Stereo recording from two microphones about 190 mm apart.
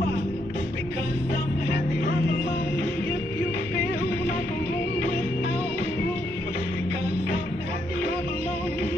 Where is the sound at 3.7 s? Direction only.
55° left (ahead or behind).